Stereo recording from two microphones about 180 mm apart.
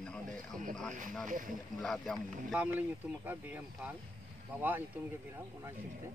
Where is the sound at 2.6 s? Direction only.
10° right (ahead or behind).